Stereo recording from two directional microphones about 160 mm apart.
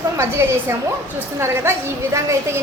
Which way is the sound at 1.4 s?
15° right (ahead or behind).